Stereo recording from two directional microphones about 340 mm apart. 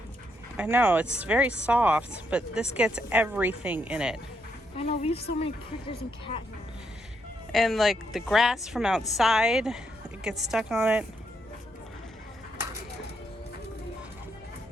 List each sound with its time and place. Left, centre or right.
0.5 s a woman's voice: centre
4.8 s a woman's voice: centre
7.5 s a woman's voice: centre